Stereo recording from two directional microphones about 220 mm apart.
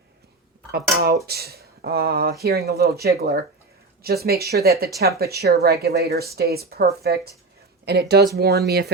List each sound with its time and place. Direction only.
0.7 s speech: 45° right (ahead or behind)